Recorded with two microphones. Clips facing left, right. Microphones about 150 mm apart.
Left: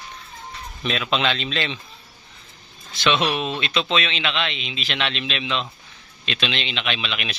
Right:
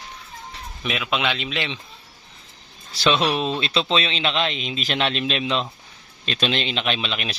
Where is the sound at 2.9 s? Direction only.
35° right (ahead or behind).